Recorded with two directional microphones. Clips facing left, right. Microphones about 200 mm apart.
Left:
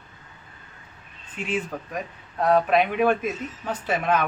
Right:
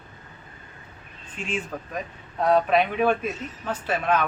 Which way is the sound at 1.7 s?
5° left (ahead or behind).